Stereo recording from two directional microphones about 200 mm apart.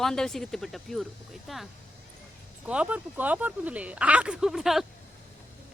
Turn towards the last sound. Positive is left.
turn(degrees=0)  # may be behind; listen again after turning